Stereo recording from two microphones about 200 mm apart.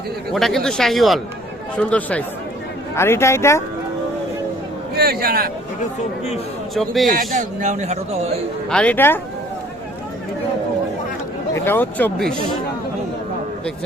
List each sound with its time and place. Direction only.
0.3 s speech: centre (ahead or behind)
4.9 s speech: 50° right (ahead or behind)
6.7 s speech: centre (ahead or behind)
7.1 s speech: 40° right (ahead or behind)
8.7 s speech: 5° left (ahead or behind)
11.5 s speech: 10° left (ahead or behind)